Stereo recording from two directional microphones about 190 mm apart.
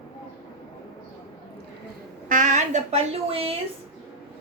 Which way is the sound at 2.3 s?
40° right (ahead or behind).